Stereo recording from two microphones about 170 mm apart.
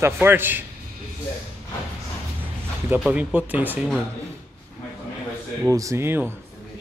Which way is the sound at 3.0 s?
10° right (ahead or behind).